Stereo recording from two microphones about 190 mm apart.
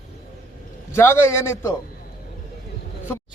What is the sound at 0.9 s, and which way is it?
Speech, 15° left (ahead or behind).